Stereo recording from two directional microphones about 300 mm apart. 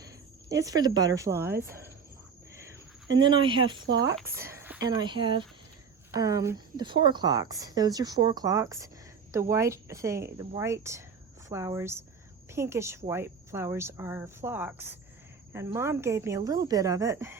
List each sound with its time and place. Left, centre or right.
0.0 s speech: centre
2.6 s speech: centre
4.4 s a sound: centre
4.9 s speech: centre